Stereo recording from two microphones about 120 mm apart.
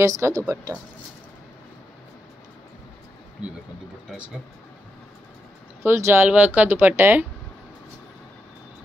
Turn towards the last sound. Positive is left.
turn(degrees=-20)  # may be behind; listen again after turning